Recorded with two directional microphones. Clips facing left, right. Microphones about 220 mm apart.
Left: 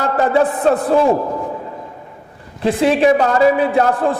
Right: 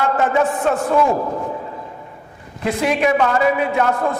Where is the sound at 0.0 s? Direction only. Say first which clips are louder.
Left 2 dB; 35° left (ahead or behind).